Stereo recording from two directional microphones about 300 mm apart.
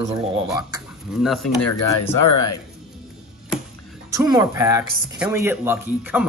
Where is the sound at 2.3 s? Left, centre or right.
Left.